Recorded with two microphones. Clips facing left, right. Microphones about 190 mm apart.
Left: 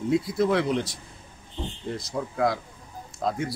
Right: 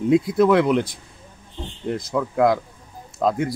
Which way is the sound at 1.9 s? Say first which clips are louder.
Right 9 dB; 75° right (ahead or behind).